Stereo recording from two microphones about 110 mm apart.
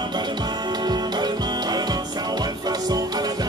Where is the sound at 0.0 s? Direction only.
40° right (ahead or behind).